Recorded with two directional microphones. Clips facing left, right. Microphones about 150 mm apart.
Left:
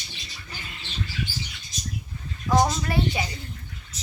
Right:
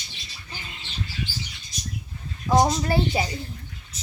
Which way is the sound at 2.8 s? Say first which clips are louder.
Right 3 dB; 30° right (ahead or behind).